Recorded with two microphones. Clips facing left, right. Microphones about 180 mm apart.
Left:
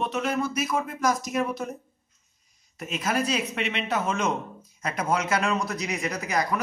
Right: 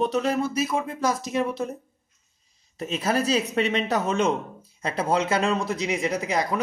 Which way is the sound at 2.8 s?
30° right (ahead or behind).